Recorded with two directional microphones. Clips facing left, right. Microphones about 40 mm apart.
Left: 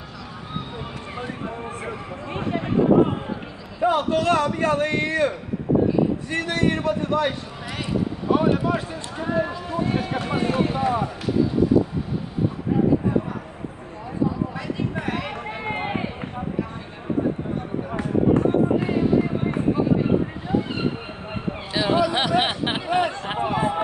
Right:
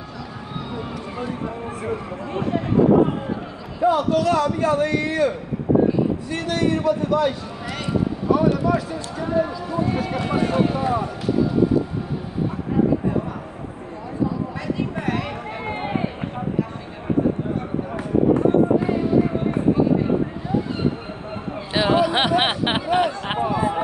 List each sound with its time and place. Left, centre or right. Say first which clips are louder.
2.3 s speech: right 3 dB; left
3.8 s a man's voice: right 2 dB; left
6.3 s a man's voice: right 2 dB; left
10.1 s a man's voice: right 2 dB; left
10.8 s speech: even; centre
15.0 s a sound: right 2 dB; centre
21.7 s speech: right 3 dB; right
23.4 s speech: right 1 dB; left